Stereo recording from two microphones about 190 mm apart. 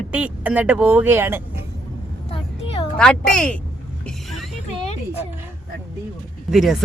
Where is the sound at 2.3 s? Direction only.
30° left (ahead or behind).